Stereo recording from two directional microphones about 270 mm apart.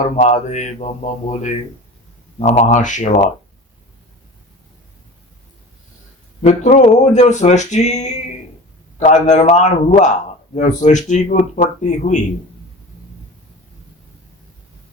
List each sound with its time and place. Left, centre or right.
0.2 s a man's voice: left
6.4 s a man's voice: left